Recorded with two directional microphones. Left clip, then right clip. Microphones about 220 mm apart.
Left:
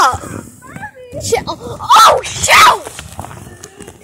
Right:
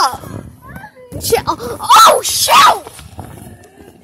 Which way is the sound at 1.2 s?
30° right (ahead or behind).